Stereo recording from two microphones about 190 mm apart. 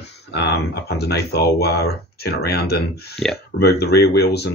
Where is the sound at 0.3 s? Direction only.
65° left (ahead or behind).